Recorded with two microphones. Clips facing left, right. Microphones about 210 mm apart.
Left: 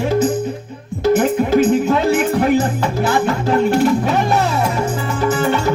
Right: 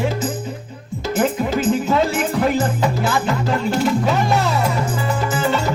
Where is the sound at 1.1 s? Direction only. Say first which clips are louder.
Left 3 dB; 60° left (ahead or behind).